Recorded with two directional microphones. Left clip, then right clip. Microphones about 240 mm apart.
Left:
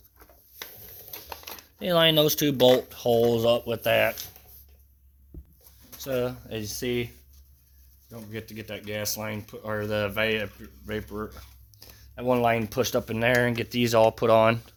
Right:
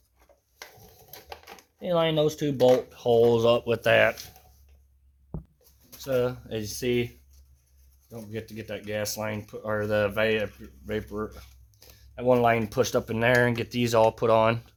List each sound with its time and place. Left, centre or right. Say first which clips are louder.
1.8 s speech: left 3 dB; left
2.9 s speech: even; left
3.2 s speech: right 2 dB; centre
6.0 s speech: right 2 dB; left
6.5 s speech: right 2 dB; centre
8.1 s speech: right 1 dB; centre